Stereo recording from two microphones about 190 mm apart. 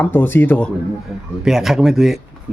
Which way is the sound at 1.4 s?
Centre (ahead or behind).